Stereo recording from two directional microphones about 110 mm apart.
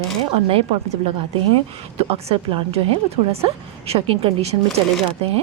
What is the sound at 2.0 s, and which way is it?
Speech, 65° right (ahead or behind).